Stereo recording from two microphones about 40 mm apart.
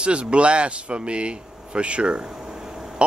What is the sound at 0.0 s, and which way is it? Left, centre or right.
Speech, right.